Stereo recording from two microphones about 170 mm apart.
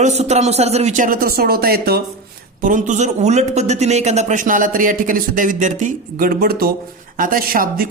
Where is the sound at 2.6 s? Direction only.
50° right (ahead or behind).